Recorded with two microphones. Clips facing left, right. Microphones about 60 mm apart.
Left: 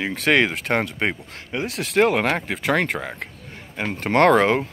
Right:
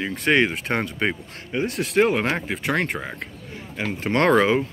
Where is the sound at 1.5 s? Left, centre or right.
Left.